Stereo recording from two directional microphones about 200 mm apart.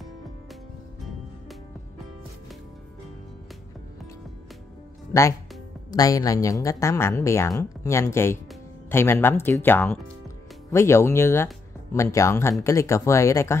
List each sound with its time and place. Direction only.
5.9 s a woman's voice: 15° left (ahead or behind)